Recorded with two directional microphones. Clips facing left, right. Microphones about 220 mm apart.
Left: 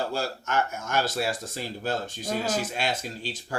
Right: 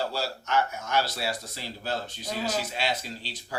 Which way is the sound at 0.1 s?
50° left (ahead or behind).